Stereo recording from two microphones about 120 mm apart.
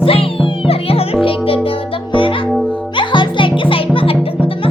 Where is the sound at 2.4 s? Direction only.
Centre (ahead or behind).